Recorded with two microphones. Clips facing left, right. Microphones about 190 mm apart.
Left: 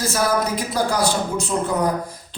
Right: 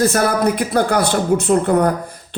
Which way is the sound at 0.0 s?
60° right (ahead or behind).